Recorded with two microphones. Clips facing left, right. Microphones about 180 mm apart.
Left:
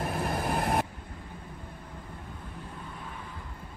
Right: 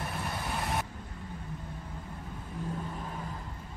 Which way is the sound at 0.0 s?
50° left (ahead or behind).